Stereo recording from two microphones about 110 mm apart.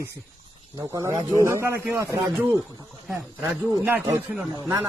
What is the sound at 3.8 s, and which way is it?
Speech, 20° right (ahead or behind).